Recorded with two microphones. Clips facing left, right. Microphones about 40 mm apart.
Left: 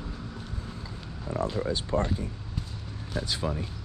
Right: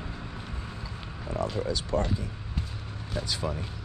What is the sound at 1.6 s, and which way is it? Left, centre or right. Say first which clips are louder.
Speech: left 1 dB; left.